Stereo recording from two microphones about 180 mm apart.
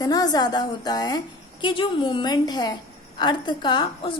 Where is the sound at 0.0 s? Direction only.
20° left (ahead or behind).